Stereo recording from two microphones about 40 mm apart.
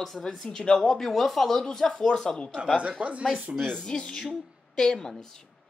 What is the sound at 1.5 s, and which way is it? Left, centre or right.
Speech, centre.